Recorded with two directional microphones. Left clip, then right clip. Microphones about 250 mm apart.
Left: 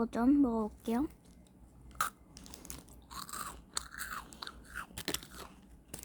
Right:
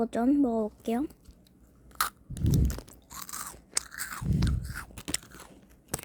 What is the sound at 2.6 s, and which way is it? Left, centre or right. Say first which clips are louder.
Chewing: right 13 dB; centre.